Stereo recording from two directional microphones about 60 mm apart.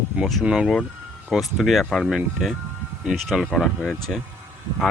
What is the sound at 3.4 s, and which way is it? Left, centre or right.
Speech, centre.